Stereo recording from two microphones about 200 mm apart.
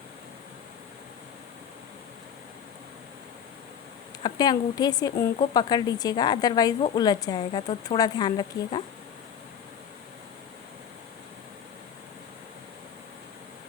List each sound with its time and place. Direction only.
4.2 s a woman's voice: 20° left (ahead or behind)